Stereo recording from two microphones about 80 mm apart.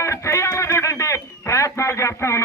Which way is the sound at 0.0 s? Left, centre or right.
Left.